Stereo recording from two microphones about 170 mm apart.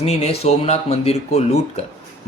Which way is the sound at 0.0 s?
40° left (ahead or behind).